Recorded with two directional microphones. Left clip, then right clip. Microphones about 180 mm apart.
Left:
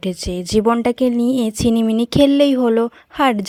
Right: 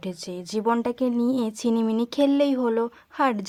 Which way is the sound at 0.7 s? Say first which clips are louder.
Left 8 dB; 30° left (ahead or behind).